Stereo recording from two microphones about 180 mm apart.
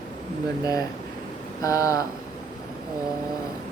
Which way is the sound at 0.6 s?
20° left (ahead or behind).